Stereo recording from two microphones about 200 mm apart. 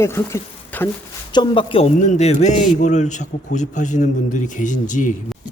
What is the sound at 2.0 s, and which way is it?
A man's voice, 35° left (ahead or behind).